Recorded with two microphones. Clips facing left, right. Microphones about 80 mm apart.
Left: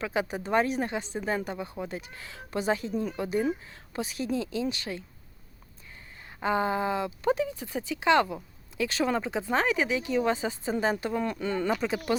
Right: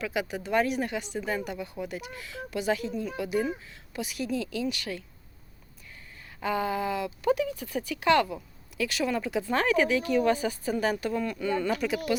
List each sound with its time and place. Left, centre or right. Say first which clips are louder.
0.0 s speech: left 1 dB; left
6.4 s speech: left 2 dB; left